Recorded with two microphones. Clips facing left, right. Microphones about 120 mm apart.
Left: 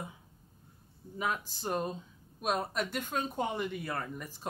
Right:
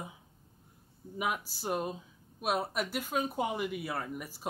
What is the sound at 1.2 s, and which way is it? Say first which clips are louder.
Speech: even; 10° right (ahead or behind).